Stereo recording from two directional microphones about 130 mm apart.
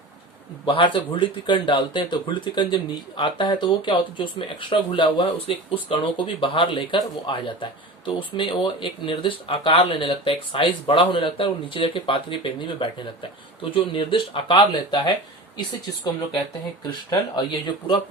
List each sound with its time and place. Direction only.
0.6 s speech: 40° left (ahead or behind)
16.8 s speech: 30° left (ahead or behind)